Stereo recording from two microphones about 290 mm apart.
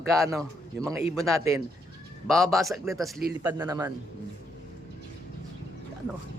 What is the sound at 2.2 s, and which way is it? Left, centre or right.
A man's voice, centre.